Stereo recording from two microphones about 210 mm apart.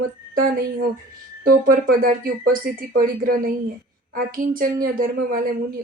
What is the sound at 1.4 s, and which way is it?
Speech, 45° right (ahead or behind).